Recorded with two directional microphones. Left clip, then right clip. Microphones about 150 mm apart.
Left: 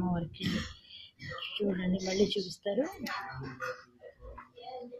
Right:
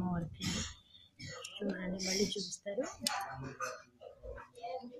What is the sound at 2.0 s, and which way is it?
Speech, 70° right (ahead or behind).